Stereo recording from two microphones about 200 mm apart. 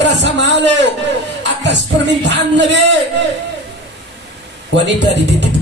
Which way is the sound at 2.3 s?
60° right (ahead or behind).